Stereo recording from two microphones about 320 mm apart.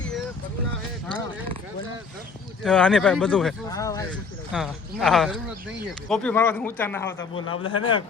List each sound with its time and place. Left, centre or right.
2.6 s speech: centre
4.5 s speech: centre
7.2 s a man's voice: left
7.6 s speech: centre